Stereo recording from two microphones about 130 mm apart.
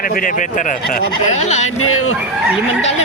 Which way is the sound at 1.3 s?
65° left (ahead or behind).